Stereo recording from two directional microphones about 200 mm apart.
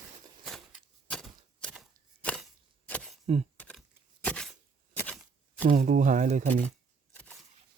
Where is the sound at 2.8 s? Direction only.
5° left (ahead or behind).